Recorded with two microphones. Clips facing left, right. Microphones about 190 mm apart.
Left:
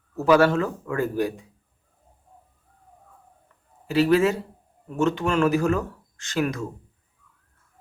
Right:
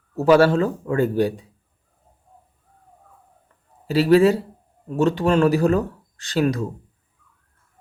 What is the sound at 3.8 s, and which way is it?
A man's voice, 30° right (ahead or behind).